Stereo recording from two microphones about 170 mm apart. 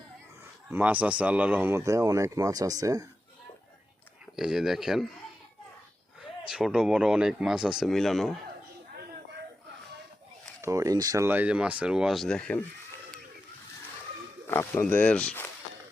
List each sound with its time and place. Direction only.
0.7 s speech: 10° right (ahead or behind)
4.4 s speech: 5° right (ahead or behind)
6.5 s speech: 5° right (ahead or behind)
10.6 s speech: 20° right (ahead or behind); by 12.6 s 5° left (ahead or behind)
14.4 s speech: 15° left (ahead or behind)